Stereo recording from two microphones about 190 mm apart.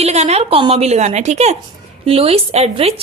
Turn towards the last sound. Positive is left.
turn(degrees=-30)  # may be behind; listen again after turning